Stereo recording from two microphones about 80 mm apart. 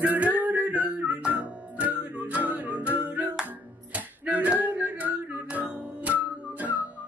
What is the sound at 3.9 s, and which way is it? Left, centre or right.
Music, centre.